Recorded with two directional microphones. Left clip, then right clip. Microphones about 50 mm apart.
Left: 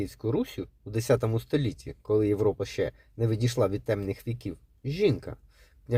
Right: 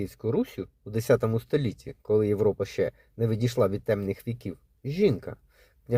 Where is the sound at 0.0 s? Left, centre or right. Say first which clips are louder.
Right 1 dB; right.